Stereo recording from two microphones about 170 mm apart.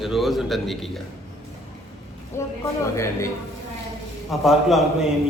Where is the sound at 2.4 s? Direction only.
15° left (ahead or behind).